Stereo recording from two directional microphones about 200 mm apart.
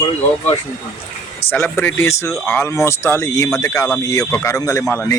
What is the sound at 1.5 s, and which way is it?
Speech, 10° left (ahead or behind).